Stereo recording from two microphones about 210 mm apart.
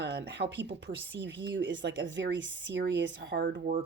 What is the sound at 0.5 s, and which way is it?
Speech, 55° right (ahead or behind).